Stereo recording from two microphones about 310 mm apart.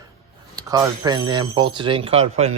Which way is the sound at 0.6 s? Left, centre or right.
Centre.